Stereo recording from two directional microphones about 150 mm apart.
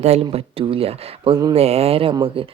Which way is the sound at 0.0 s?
40° right (ahead or behind).